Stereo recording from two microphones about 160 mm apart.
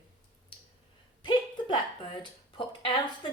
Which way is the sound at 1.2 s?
30° left (ahead or behind).